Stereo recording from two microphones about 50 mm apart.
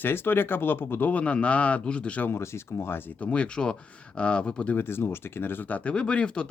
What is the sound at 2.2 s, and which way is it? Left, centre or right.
Speech, left.